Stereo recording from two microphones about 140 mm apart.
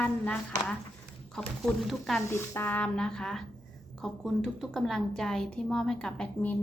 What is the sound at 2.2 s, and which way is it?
A woman's voice, 15° left (ahead or behind).